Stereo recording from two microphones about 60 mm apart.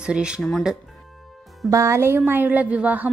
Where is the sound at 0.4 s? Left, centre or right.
Centre.